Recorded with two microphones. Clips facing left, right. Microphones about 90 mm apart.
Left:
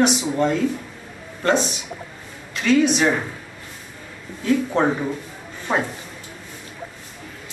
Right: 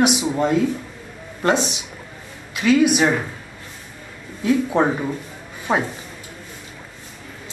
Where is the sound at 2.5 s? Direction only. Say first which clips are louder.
Right 2 dB; 10° right (ahead or behind).